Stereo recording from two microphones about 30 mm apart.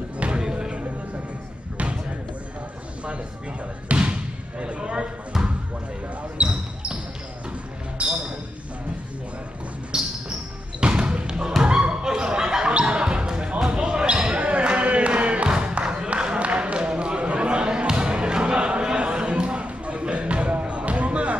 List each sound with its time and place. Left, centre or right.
0.4 s music: right
3.9 s basketball bounce: right
4.6 s speech: right
6.3 s basketball bounce: right
8.0 s basketball bounce: right
9.9 s music: right
10.8 s basketball bounce: right
11.9 s a sound: right
13.0 s basketball bounce: right
14.3 s a sound: right
16.3 s basketball bounce: right
18.9 s a sound: right